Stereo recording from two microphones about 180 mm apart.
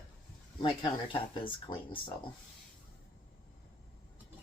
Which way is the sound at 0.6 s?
25° left (ahead or behind).